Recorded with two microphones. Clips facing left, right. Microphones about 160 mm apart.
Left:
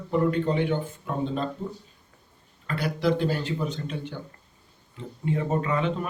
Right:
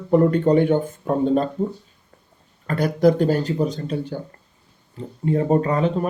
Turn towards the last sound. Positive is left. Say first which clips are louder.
# right 6 dB
turn(degrees=-40)  # may be behind; listen again after turning